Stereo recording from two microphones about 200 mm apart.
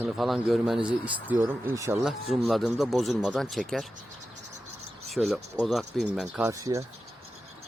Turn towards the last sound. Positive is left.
turn(degrees=-15)  # may be behind; listen again after turning